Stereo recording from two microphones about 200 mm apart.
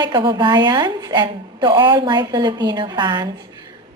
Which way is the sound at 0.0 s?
25° right (ahead or behind).